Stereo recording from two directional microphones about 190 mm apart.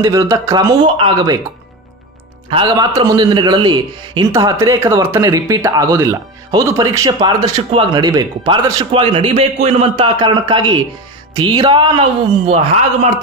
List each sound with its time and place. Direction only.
0.0 s a man's voice: 15° right (ahead or behind)
2.5 s a man's voice: 25° right (ahead or behind)
12.4 s speech: 35° right (ahead or behind)